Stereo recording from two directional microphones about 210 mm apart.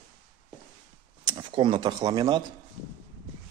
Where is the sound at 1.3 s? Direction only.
25° right (ahead or behind).